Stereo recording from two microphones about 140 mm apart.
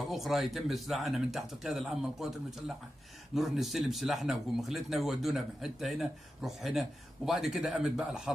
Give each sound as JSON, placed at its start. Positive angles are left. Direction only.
{"t": 0.1, "sound": "speech", "side_deg": 0}